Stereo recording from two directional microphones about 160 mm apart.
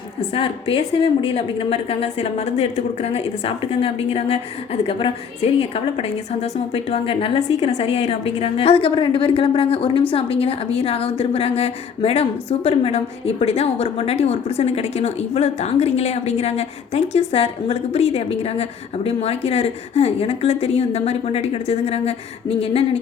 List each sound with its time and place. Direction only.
0.2 s a woman's voice: 35° left (ahead or behind)